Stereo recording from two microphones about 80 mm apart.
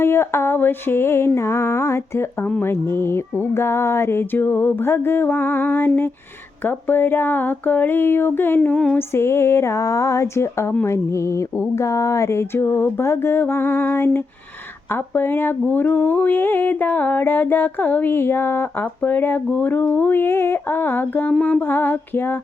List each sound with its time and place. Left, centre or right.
0.0 s music: left
2.6 s speech: left
8.7 s female singing: centre
9.0 s music: left
14.9 s speech: left